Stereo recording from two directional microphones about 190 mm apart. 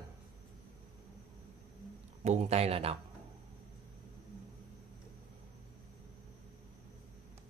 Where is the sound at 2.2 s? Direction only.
35° right (ahead or behind).